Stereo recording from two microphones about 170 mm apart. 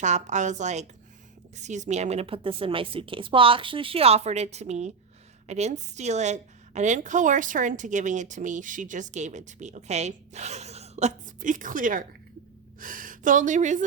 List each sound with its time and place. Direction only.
0.0 s a woman's voice: 45° right (ahead or behind)